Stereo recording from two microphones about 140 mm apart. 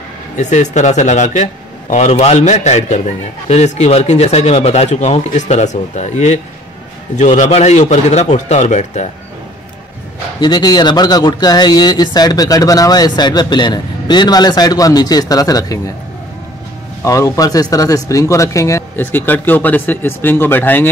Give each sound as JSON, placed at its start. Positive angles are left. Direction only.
{"t": 0.4, "sound": "speech", "side_deg": 60}
{"t": 10.4, "sound": "speech", "side_deg": 30}
{"t": 17.0, "sound": "speech", "side_deg": 20}